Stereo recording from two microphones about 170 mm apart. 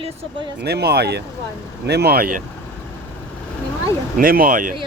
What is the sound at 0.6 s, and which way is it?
Speech, 70° right (ahead or behind).